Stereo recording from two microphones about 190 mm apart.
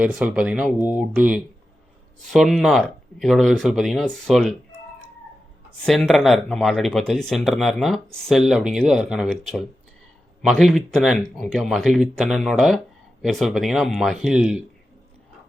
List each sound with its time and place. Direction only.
0.0 s speech: 5° right (ahead or behind)
5.8 s speech: centre (ahead or behind)